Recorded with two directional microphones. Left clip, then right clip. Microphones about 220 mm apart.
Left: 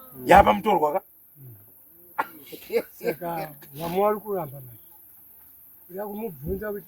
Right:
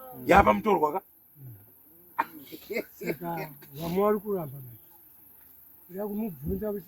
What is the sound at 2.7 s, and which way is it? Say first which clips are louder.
Speech: left 7 dB; 50° left (ahead or behind).